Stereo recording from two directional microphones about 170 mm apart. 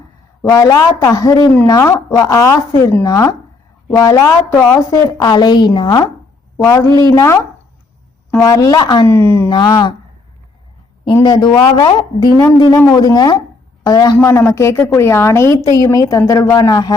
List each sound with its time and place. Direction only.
0.4 s a woman's voice: 20° left (ahead or behind)
9.0 s a woman's voice: 15° left (ahead or behind)
9.5 s a woman's voice: 25° left (ahead or behind)
11.0 s a woman's voice: 25° left (ahead or behind)